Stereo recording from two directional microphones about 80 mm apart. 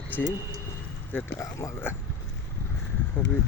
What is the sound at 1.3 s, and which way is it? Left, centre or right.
Speech, left.